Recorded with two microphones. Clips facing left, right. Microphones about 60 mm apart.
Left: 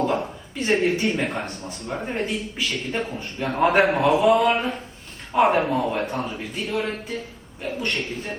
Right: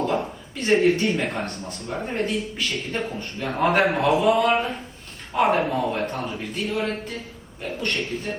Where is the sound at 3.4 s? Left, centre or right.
Left.